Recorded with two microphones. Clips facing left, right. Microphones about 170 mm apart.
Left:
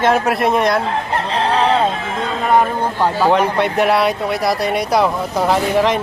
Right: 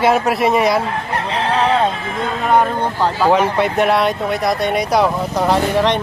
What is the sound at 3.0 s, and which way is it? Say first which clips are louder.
Speech: left 1 dB; 10° left (ahead or behind).